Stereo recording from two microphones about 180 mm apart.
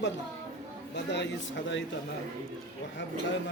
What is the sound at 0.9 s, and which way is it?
Speech, 75° left (ahead or behind).